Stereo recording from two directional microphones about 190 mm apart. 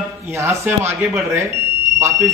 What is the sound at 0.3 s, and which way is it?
Speech, 15° right (ahead or behind).